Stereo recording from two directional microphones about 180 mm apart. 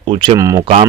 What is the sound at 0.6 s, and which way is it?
Speech, 30° right (ahead or behind).